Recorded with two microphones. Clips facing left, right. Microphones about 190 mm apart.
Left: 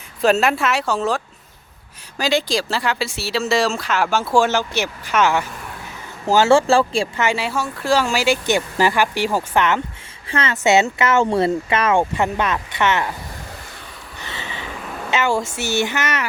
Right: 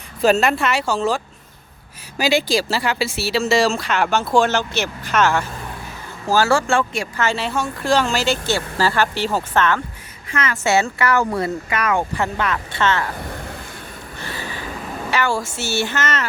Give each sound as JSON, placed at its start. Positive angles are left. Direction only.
{"t": 0.2, "sound": "speech", "side_deg": 0}
{"t": 7.2, "sound": "speech", "side_deg": 10}
{"t": 10.2, "sound": "speech", "side_deg": 30}
{"t": 14.2, "sound": "a sound", "side_deg": 20}
{"t": 15.1, "sound": "speech", "side_deg": 20}